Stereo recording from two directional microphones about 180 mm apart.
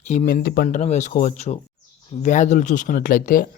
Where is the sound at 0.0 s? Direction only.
40° left (ahead or behind).